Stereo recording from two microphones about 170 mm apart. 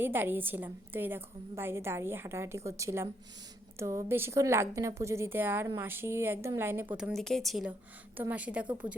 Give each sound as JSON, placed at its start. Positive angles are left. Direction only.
{"t": 0.0, "sound": "a woman's voice", "side_deg": -10}
{"t": 6.9, "sound": "a woman's voice", "side_deg": 0}